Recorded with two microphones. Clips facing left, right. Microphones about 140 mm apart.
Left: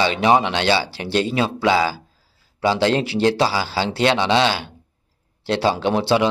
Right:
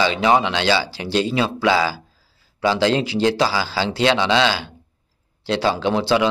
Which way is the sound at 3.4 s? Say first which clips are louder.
Even; 25° left (ahead or behind).